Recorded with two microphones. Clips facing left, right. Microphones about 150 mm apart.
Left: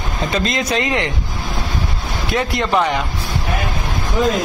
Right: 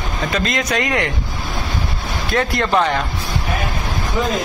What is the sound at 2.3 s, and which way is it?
Speech, 20° left (ahead or behind).